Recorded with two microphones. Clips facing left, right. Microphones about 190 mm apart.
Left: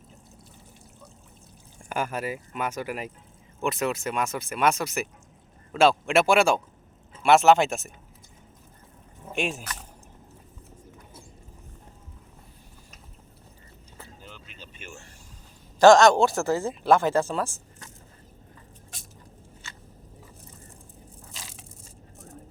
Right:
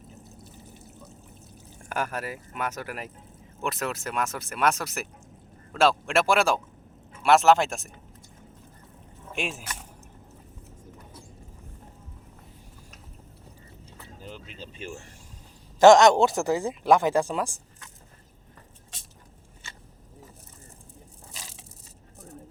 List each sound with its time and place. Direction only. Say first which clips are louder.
1.9 s speech: left 2 dB; centre (ahead or behind)
9.3 s speech: left 3 dB; centre (ahead or behind)
14.3 s vehicle: right 6 dB; 35° right (ahead or behind)
15.8 s speech: even; 20° right (ahead or behind)